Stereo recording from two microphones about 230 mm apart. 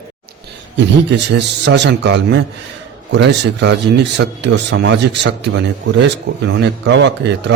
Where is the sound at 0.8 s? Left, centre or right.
Right.